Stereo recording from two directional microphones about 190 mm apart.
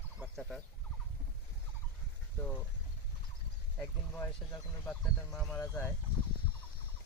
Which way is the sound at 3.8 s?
15° left (ahead or behind).